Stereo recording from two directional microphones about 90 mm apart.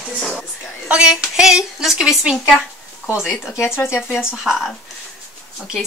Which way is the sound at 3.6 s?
30° left (ahead or behind).